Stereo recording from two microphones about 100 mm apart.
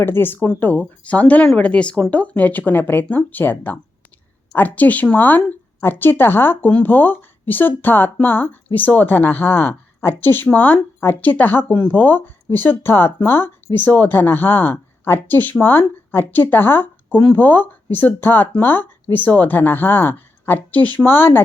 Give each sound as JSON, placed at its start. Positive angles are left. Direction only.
{"t": 0.0, "sound": "speech", "side_deg": 20}